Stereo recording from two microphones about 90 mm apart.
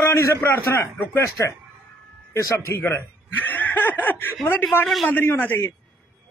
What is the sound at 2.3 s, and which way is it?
Chuckle, 30° left (ahead or behind).